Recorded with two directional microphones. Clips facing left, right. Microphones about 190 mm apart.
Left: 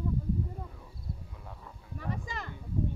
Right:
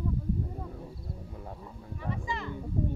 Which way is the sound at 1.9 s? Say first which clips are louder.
Right 2 dB; 40° left (ahead or behind).